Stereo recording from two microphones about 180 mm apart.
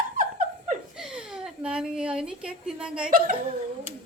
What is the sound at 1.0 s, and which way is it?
A woman's voice, 5° right (ahead or behind).